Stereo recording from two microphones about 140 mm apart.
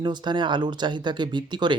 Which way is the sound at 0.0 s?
30° right (ahead or behind).